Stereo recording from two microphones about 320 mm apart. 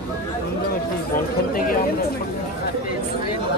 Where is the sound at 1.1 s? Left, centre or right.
Left.